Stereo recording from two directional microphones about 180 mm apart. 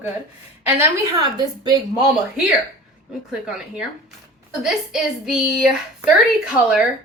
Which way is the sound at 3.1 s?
Centre (ahead or behind).